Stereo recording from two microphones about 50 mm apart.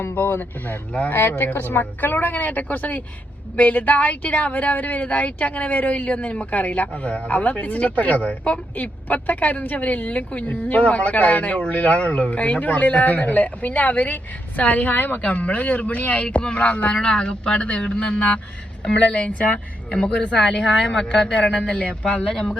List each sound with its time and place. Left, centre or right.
0.0 s speech: left
20.5 s speech: centre